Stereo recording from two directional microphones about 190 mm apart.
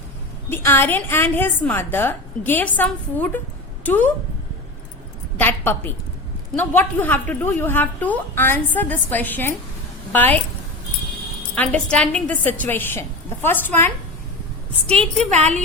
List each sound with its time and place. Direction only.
0.5 s a woman's voice: 10° left (ahead or behind)
5.4 s a woman's voice: 10° left (ahead or behind)
11.5 s a woman's voice: 5° left (ahead or behind)
15.3 s a woman's voice: 35° right (ahead or behind)